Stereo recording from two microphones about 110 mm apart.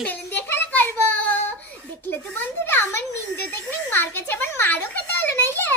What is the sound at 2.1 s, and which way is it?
Speech, 15° left (ahead or behind).